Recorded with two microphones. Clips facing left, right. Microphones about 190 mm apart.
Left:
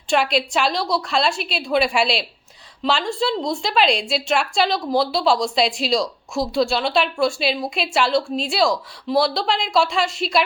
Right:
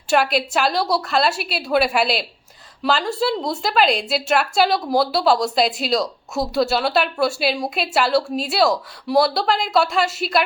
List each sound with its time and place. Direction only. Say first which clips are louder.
0.1 s speech: right 1 dB; 5° right (ahead or behind)